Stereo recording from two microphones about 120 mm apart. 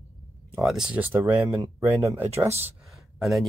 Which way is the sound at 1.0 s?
20° right (ahead or behind).